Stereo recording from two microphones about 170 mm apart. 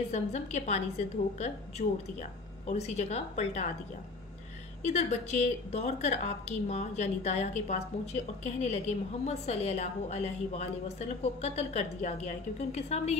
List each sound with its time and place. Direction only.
0.1 s a woman's voice: 40° left (ahead or behind)
4.8 s a woman's voice: 40° left (ahead or behind)